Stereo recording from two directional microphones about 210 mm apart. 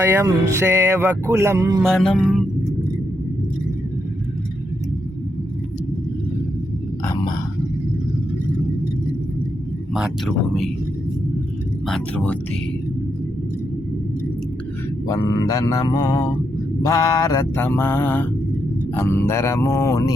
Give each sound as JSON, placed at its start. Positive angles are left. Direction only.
{"t": 0.0, "sound": "speech", "side_deg": -15}
{"t": 1.8, "sound": "speech", "side_deg": 0}
{"t": 9.9, "sound": "speech", "side_deg": 0}
{"t": 11.9, "sound": "mantra", "side_deg": 5}
{"t": 15.0, "sound": "mantra", "side_deg": 15}